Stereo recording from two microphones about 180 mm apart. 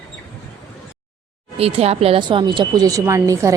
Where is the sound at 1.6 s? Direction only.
35° right (ahead or behind).